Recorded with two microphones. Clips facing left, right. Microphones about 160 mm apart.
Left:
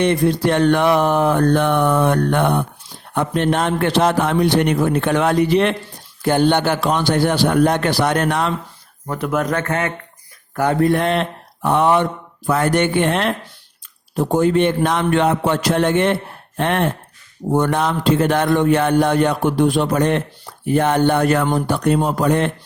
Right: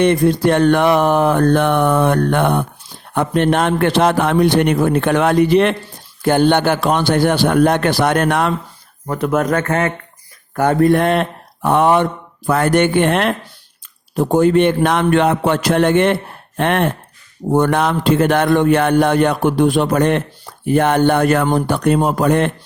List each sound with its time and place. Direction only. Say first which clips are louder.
0.0 s speech: right 3 dB; 50° right (ahead or behind)
9.0 s speech: right 4 dB; 45° right (ahead or behind)